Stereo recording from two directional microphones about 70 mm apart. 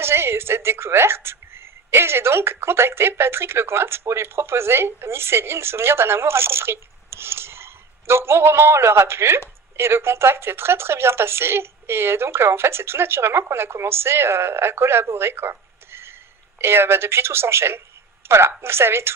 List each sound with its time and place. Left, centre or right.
0.0 s a woman's voice: right